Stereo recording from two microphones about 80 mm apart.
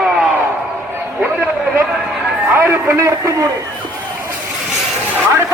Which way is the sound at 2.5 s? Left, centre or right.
Right.